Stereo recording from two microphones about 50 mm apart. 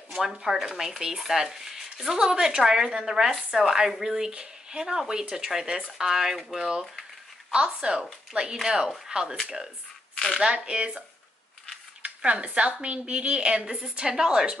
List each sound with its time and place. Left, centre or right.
0.1 s a woman's voice: centre
8.5 s speech: centre
10.1 s a sound: left
10.4 s speech: centre
12.2 s a woman's voice: right